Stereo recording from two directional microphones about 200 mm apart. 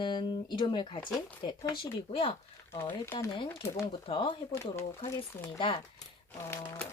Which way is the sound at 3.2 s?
20° left (ahead or behind).